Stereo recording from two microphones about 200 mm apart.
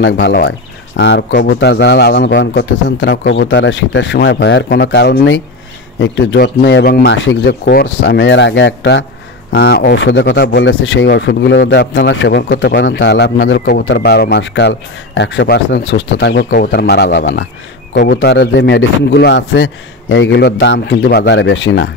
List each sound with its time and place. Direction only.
0.0 s speech: 55° left (ahead or behind)
8.0 s speech: 65° left (ahead or behind)